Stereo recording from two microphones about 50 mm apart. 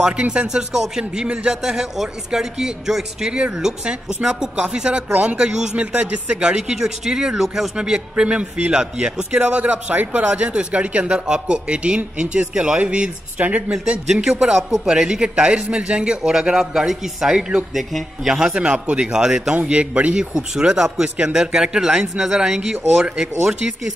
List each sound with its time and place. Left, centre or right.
0.0 s speech: right
5.8 s speech: right
7.4 s speech: centre
7.7 s speech: centre
14.0 s speech: centre
18.5 s speech: right